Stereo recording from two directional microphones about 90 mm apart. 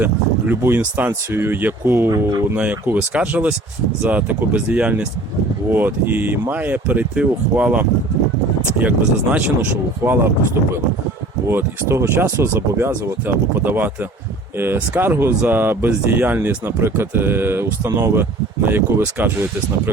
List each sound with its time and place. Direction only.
0.0 s speech: 25° right (ahead or behind)
2.0 s speech: 40° right (ahead or behind)
2.6 s speech: 15° right (ahead or behind)
10.0 s speech: 25° right (ahead or behind)